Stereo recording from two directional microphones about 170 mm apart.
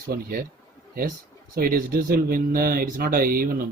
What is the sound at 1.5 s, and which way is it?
Speech, 60° right (ahead or behind).